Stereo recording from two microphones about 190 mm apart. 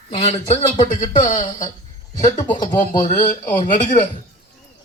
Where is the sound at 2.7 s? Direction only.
45° left (ahead or behind).